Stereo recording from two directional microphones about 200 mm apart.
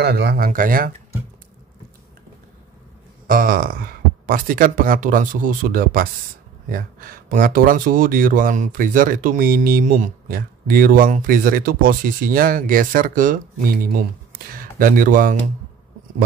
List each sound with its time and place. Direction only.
0.0 s speech: 55° right (ahead or behind)
3.3 s speech: 45° right (ahead or behind)